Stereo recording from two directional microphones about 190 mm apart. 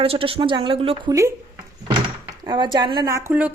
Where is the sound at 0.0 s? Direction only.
30° right (ahead or behind).